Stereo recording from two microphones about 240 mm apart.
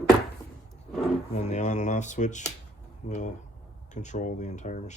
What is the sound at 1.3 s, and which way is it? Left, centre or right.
Speech, left.